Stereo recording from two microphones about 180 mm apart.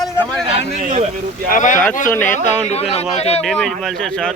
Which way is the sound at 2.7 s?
35° left (ahead or behind).